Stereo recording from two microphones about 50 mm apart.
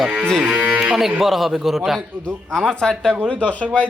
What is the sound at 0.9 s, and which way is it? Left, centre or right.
Speech, centre.